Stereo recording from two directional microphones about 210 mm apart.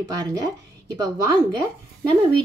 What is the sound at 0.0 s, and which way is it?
Speech, 20° right (ahead or behind).